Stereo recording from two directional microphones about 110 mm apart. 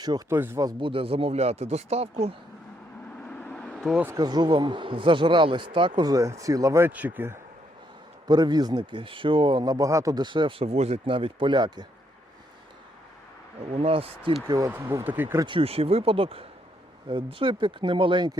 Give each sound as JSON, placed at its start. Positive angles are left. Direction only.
{"t": 0.3, "sound": "speech", "side_deg": -20}
{"t": 0.6, "sound": "speech", "side_deg": -35}
{"t": 0.9, "sound": "speech", "side_deg": -55}
{"t": 3.2, "sound": "vehicle", "side_deg": 10}
{"t": 4.2, "sound": "speech", "side_deg": -40}
{"t": 6.1, "sound": "speech", "side_deg": -30}
{"t": 6.9, "sound": "speech", "side_deg": -15}
{"t": 8.3, "sound": "speech", "side_deg": -40}
{"t": 13.7, "sound": "speech", "side_deg": -60}
{"t": 14.4, "sound": "speech", "side_deg": -35}
{"t": 14.7, "sound": "speech", "side_deg": -25}
{"t": 15.4, "sound": "speech", "side_deg": -55}